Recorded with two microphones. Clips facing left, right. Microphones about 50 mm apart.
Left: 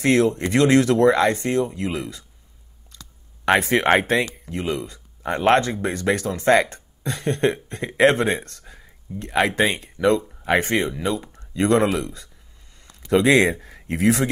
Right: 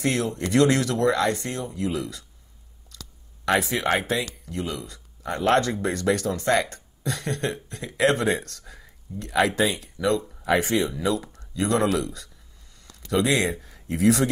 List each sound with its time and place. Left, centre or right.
0.0 s speech: left
2.9 s clicking: left
4.5 s speech: left
13.3 s speech: left
14.0 s speech: left